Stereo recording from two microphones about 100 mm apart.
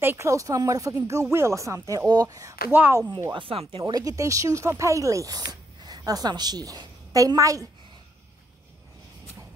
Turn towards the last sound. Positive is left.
turn(degrees=-35)  # may be behind; listen again after turning